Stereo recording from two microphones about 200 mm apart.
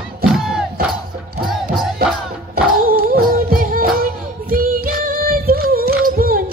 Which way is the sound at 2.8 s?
50° right (ahead or behind).